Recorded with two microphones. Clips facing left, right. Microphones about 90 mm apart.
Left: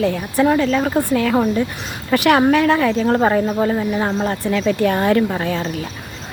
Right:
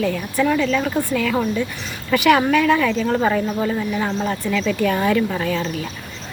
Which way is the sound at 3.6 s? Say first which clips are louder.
Left 3 dB; 25° left (ahead or behind).